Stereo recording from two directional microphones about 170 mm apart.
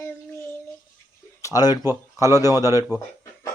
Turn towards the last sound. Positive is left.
turn(degrees=-15)  # may be behind; listen again after turning